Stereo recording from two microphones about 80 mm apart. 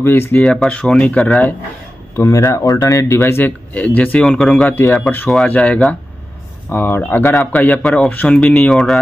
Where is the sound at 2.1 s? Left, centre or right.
Left.